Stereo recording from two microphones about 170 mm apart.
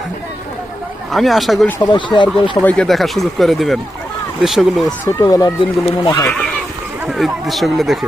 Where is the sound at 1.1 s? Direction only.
Centre (ahead or behind).